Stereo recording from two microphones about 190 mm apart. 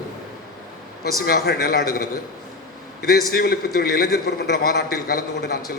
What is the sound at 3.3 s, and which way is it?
A man's voice, 55° left (ahead or behind).